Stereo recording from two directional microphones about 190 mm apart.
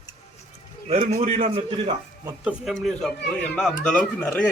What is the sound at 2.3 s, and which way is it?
A man's voice, 5° right (ahead or behind).